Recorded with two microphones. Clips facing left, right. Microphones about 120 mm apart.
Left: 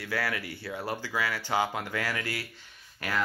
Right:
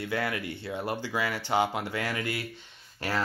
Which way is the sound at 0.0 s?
25° right (ahead or behind).